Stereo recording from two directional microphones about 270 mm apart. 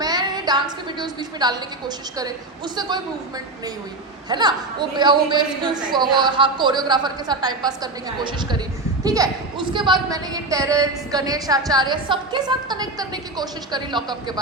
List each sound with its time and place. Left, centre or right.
0.0 s a woman's voice: centre
4.3 s a woman's voice: centre